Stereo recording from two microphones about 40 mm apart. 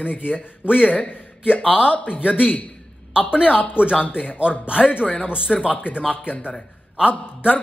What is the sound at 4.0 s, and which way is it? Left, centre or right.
Speech, left.